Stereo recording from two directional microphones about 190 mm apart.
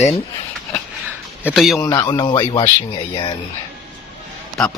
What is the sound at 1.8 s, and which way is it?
Speech, 15° left (ahead or behind).